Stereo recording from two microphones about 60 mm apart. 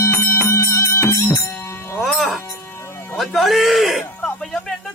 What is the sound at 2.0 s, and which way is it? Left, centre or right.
Music, centre.